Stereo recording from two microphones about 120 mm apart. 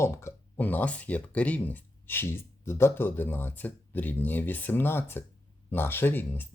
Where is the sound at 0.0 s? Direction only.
20° left (ahead or behind).